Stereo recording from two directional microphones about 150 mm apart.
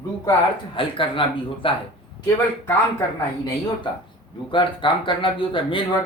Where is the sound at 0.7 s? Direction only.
35° left (ahead or behind).